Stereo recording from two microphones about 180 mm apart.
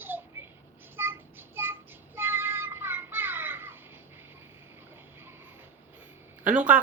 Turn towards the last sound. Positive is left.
turn(degrees=-5)  # may be behind; listen again after turning